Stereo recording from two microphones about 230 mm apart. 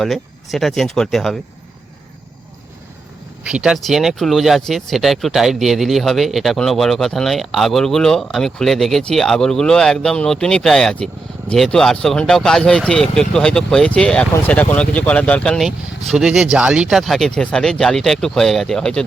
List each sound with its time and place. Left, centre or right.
0.0 s speech: centre
3.4 s speech: centre